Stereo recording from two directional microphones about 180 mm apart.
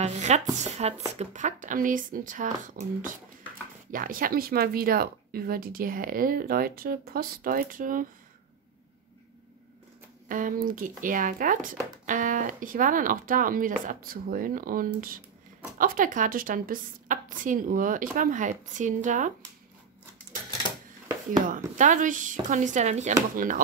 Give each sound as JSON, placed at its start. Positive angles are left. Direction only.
{"t": 0.0, "sound": "speech", "side_deg": -40}
{"t": 3.9, "sound": "speech", "side_deg": -50}
{"t": 10.2, "sound": "speech", "side_deg": -50}
{"t": 21.5, "sound": "speech", "side_deg": -45}